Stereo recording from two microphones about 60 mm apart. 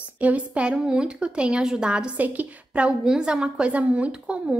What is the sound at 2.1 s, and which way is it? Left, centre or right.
A woman's voice, right.